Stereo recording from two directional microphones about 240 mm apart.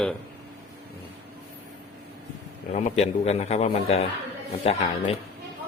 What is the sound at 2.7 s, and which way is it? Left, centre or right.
A man's voice, left.